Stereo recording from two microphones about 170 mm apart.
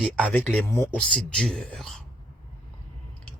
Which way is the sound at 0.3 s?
10° left (ahead or behind).